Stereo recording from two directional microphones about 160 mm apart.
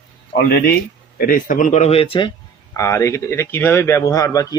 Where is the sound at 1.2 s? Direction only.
60° left (ahead or behind); by 2.3 s 35° left (ahead or behind).